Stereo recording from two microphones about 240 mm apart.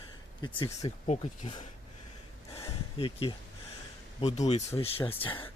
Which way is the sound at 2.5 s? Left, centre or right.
Left.